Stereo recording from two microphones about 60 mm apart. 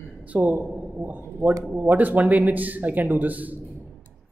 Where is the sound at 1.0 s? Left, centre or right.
Right.